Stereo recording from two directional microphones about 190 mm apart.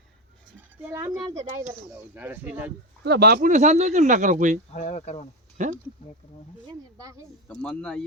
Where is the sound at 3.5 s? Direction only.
40° right (ahead or behind).